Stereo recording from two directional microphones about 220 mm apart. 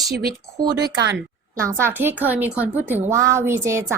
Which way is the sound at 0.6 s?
15° right (ahead or behind).